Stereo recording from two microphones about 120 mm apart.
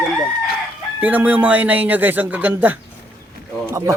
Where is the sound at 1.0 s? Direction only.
15° right (ahead or behind).